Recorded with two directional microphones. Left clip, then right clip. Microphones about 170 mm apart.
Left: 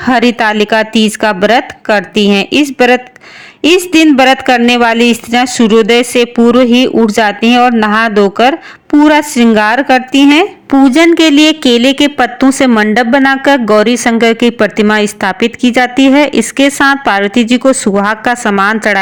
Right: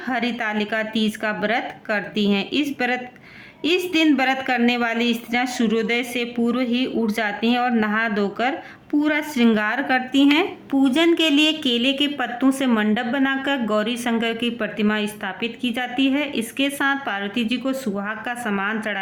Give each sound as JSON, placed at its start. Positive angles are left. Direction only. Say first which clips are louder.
{"t": 0.0, "sound": "speech", "louder": "left 15 dB", "side_deg": 50}